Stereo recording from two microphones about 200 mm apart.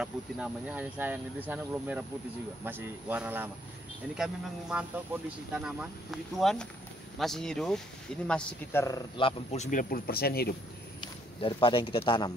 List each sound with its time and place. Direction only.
0.0 s speech: 5° right (ahead or behind)
8.8 s speech: 20° left (ahead or behind); by 10.5 s 50° left (ahead or behind)
11.0 s speech: 25° left (ahead or behind)